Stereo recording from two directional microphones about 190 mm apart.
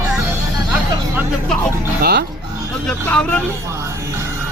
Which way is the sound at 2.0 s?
55° right (ahead or behind).